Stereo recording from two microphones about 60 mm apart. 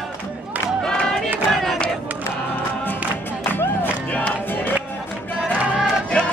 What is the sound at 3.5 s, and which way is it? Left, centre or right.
Music, left.